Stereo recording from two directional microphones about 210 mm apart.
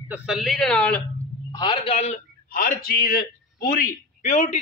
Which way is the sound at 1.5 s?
20° left (ahead or behind).